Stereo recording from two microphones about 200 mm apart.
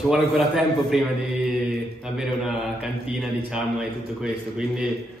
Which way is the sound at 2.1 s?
5° right (ahead or behind).